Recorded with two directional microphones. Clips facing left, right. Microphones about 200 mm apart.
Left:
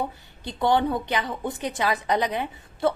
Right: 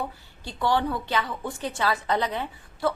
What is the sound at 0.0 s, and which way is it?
A woman's voice, 20° left (ahead or behind).